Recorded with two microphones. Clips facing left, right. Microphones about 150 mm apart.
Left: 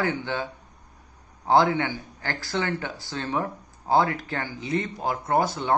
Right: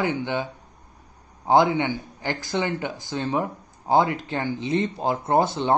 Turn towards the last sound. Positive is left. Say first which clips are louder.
# right 3 dB
turn(degrees=-25)  # may be behind; listen again after turning